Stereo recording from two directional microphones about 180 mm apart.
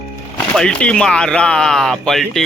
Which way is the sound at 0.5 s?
5° left (ahead or behind).